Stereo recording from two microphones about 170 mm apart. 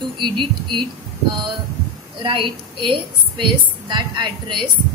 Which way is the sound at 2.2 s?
30° right (ahead or behind).